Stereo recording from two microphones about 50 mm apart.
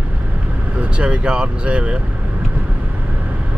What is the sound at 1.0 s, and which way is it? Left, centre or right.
Speech, right.